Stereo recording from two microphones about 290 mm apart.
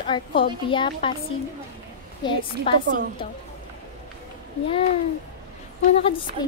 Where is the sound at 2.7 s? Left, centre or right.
Centre.